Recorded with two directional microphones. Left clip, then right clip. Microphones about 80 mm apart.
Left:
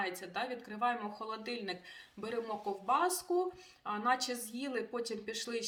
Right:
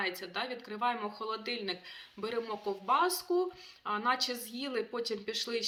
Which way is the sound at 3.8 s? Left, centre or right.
Left.